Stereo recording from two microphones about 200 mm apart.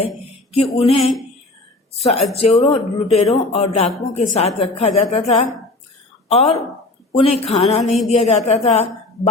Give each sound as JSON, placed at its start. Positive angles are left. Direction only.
{"t": 0.5, "sound": "a woman's voice", "side_deg": 30}